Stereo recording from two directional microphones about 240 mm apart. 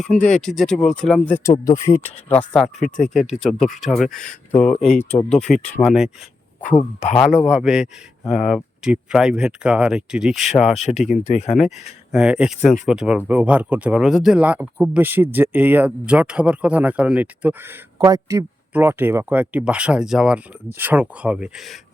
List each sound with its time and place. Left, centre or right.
0.0 s speech: centre
6.6 s speech: left
7.4 s speech: centre
10.8 s speech: left
12.1 s speech: centre